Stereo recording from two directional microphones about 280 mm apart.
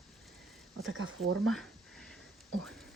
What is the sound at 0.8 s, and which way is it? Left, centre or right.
Speech, right.